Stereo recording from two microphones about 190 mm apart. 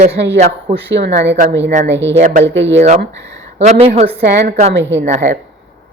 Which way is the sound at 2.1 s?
40° right (ahead or behind).